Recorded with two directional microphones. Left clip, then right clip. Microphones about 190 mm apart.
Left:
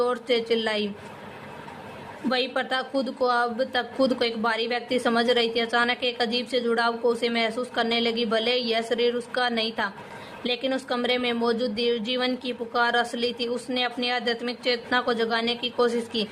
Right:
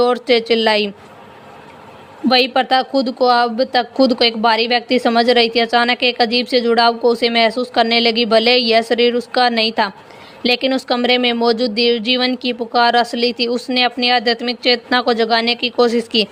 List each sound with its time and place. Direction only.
0.0 s speech: 40° right (ahead or behind)
2.3 s speech: 40° right (ahead or behind)